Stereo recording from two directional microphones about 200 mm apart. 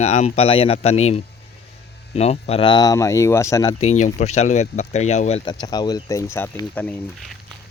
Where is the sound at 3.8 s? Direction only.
35° left (ahead or behind); by 7.4 s 5° left (ahead or behind).